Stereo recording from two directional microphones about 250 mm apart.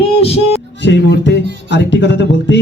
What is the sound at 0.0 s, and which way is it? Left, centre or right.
Speech, left.